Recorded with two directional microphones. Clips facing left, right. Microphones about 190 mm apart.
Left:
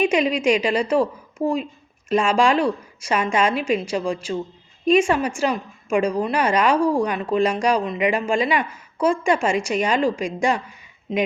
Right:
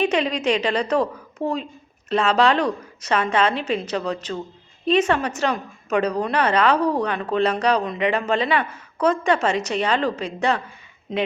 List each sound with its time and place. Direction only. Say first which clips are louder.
0.0 s a woman's voice: left 2 dB; 10° left (ahead or behind)